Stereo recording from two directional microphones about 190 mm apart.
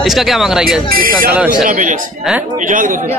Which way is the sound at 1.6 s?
45° right (ahead or behind).